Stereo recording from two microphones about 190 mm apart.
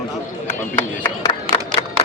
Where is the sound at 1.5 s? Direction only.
30° right (ahead or behind).